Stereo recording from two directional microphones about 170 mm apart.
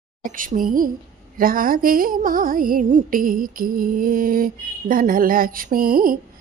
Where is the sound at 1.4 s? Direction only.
55° right (ahead or behind).